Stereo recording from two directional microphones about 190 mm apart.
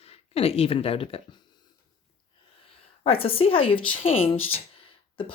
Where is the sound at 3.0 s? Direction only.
30° left (ahead or behind).